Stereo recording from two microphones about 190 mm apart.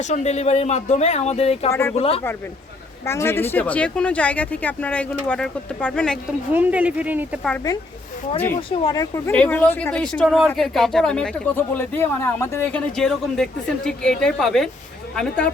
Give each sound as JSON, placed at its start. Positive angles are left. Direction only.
{"t": 0.0, "sound": "speech", "side_deg": 35}
{"t": 3.0, "sound": "speech", "side_deg": 15}
{"t": 6.5, "sound": "speech", "side_deg": -10}
{"t": 8.7, "sound": "speech", "side_deg": 25}